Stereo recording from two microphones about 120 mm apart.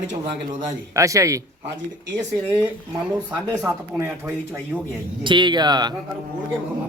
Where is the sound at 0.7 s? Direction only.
25° right (ahead or behind).